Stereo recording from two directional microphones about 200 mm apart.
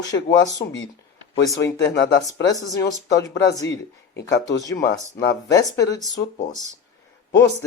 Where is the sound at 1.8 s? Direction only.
60° left (ahead or behind).